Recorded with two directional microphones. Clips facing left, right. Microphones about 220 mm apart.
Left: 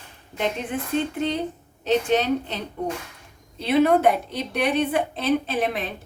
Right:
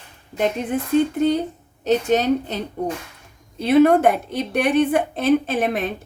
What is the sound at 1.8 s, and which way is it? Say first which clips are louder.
A woman's voice: right 3 dB; 45° right (ahead or behind).